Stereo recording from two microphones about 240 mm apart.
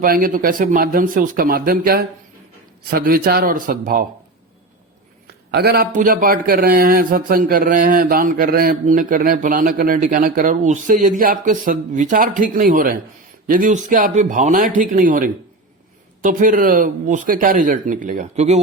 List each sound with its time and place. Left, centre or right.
0.0 s speech: right
5.5 s speech: right